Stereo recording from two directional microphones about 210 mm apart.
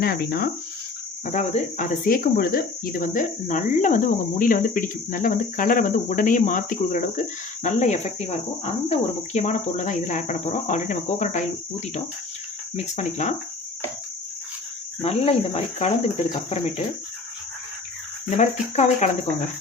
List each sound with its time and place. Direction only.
0.0 s speech: 50° left (ahead or behind)
1.2 s cricket: 35° left (ahead or behind)
12.7 s cricket: 35° left (ahead or behind)
15.0 s cricket: 30° left (ahead or behind)
18.3 s cricket: 35° left (ahead or behind)